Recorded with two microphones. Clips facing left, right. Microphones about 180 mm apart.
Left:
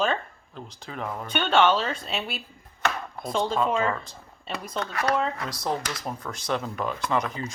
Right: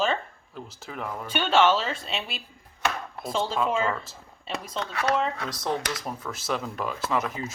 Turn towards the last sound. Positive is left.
turn(degrees=-5)  # may be behind; listen again after turning